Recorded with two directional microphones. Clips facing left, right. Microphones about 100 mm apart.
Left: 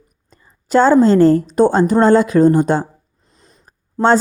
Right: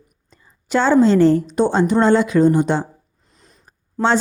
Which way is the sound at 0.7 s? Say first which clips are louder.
Left 3 dB; 40° left (ahead or behind).